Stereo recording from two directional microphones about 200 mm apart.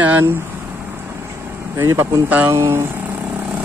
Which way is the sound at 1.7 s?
15° right (ahead or behind).